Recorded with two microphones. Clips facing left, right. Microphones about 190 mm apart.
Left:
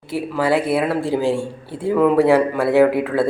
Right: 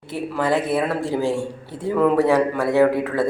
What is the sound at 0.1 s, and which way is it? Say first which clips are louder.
Speech: left 3 dB; 10° left (ahead or behind).